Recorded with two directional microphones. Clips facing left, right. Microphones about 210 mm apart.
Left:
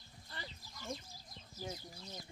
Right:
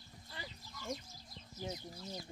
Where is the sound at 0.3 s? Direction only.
10° right (ahead or behind).